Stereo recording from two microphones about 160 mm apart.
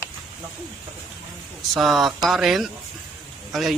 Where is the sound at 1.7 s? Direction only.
Centre (ahead or behind).